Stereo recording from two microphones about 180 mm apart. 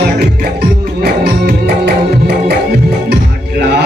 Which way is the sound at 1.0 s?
60° right (ahead or behind).